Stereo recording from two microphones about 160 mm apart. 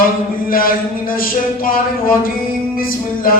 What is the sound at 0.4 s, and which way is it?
Singing, 65° left (ahead or behind).